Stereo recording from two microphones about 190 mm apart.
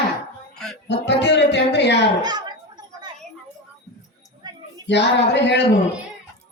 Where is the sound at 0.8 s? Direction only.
65° left (ahead or behind).